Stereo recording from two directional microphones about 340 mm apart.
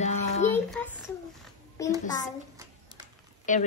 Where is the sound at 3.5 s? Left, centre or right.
Left.